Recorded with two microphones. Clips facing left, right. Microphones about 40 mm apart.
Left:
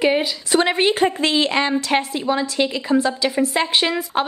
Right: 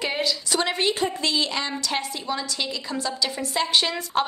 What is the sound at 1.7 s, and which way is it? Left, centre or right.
A woman's voice, left.